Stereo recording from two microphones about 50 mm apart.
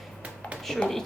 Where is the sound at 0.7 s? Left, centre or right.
Centre.